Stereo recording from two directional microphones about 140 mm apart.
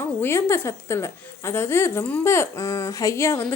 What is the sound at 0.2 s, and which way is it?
Speech, 15° left (ahead or behind).